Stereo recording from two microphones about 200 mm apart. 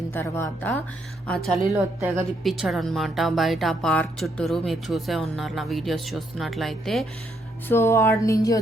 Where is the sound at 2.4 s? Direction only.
Centre (ahead or behind).